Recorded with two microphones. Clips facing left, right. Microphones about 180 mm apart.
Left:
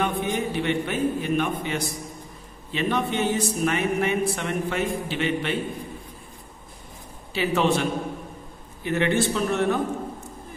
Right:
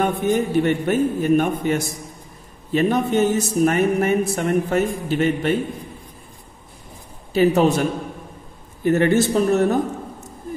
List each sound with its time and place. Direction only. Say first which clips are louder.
0.0 s a man's voice: right 6 dB; 45° right (ahead or behind)
7.3 s speech: right 6 dB; 40° right (ahead or behind)
8.8 s speech: right 6 dB; 45° right (ahead or behind)